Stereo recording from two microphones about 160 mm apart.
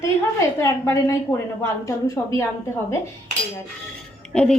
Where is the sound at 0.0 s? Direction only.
20° left (ahead or behind).